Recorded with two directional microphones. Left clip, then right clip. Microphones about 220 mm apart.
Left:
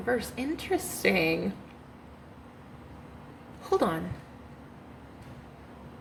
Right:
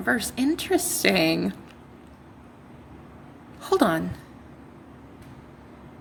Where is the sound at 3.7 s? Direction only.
50° right (ahead or behind).